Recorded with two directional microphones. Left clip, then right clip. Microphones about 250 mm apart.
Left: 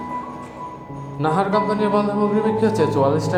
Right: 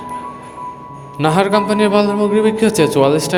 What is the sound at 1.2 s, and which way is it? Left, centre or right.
A man's voice, right.